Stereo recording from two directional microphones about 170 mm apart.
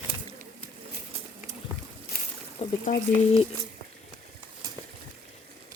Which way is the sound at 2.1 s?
60° left (ahead or behind).